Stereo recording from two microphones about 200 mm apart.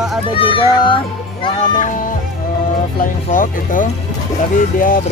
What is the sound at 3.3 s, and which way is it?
Speech, 45° left (ahead or behind).